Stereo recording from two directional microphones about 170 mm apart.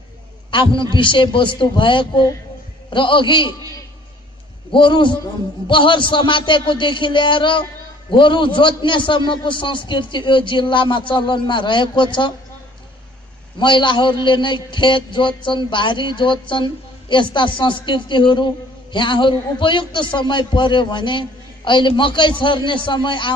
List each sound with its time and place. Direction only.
0.5 s a man's voice: 30° left (ahead or behind)
4.6 s a man's voice: 30° left (ahead or behind)
13.6 s a man's voice: 30° left (ahead or behind)